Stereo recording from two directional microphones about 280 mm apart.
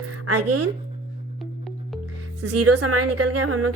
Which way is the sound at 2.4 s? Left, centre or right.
Right.